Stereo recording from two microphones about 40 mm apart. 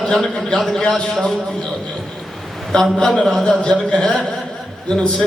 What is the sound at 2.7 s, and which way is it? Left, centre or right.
A man's voice, centre.